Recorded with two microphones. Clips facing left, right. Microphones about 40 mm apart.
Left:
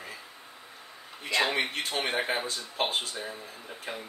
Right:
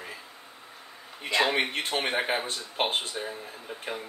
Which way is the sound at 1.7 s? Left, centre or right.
Right.